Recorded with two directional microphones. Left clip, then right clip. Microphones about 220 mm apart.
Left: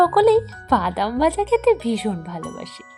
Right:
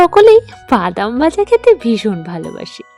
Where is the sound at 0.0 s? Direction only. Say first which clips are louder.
Right 9 dB; 40° right (ahead or behind).